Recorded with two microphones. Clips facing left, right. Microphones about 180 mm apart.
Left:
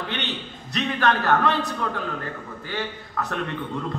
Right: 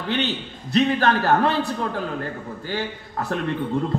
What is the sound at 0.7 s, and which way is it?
Speech, 35° right (ahead or behind).